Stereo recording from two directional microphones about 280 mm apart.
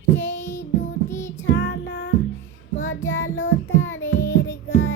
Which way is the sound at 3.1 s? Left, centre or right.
Left.